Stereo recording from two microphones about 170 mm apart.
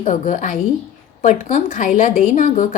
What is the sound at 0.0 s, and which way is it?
A woman's voice, 50° left (ahead or behind).